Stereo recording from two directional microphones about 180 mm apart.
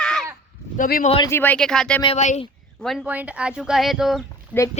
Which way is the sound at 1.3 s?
10° left (ahead or behind).